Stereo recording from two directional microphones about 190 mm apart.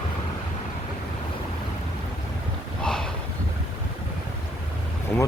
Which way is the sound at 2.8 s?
5° left (ahead or behind).